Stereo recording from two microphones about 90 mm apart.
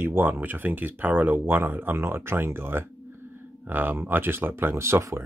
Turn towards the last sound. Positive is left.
turn(degrees=-30)  # may be behind; listen again after turning